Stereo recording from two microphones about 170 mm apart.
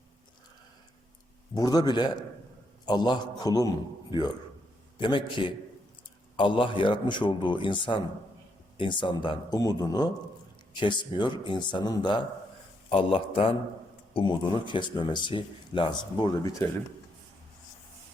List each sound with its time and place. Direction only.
1.5 s speech: 25° left (ahead or behind)
4.9 s a man's voice: 30° left (ahead or behind)